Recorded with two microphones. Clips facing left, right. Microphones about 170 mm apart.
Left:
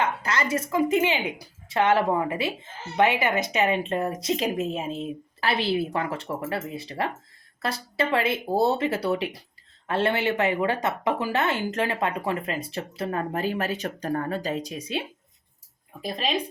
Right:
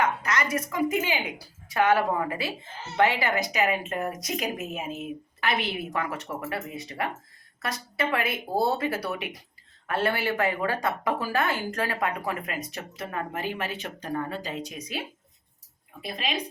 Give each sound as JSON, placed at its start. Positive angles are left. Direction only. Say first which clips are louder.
{"t": 0.0, "sound": "a woman's voice", "louder": "even", "side_deg": 30}